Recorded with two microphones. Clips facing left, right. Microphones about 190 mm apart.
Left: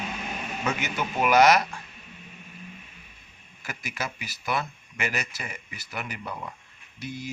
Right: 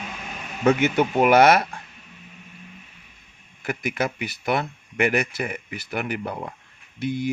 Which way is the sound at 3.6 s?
55° right (ahead or behind).